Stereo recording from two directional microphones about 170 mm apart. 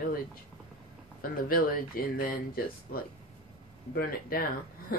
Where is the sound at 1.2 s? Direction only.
60° left (ahead or behind).